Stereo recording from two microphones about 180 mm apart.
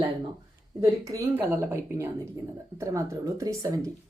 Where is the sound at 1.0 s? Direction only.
15° right (ahead or behind).